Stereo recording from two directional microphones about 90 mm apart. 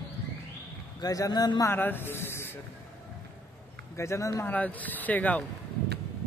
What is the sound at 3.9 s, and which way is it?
Speech, 35° left (ahead or behind).